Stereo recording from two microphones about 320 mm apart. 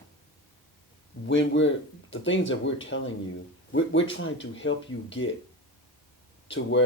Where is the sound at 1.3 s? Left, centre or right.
Left.